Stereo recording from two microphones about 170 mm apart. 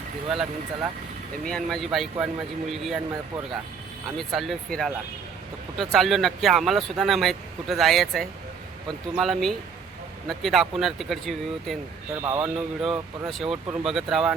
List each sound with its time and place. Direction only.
0.3 s speech: centre (ahead or behind)
4.2 s speech: centre (ahead or behind)
12.2 s speech: 20° right (ahead or behind)
12.8 s speech: centre (ahead or behind)